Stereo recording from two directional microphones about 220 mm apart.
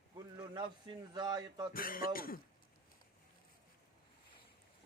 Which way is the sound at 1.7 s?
40° left (ahead or behind).